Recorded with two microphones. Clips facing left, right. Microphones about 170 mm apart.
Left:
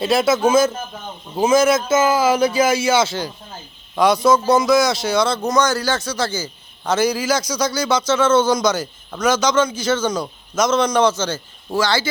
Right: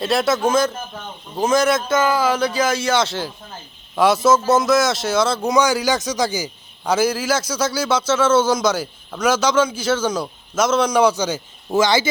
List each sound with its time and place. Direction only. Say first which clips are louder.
0.0 s a man's voice: left 2 dB; centre (ahead or behind)
11.7 s speech: right 3 dB; 20° right (ahead or behind)